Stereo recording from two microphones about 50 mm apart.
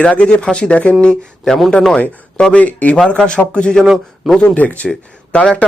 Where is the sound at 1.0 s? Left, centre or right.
Centre; by 4.8 s left.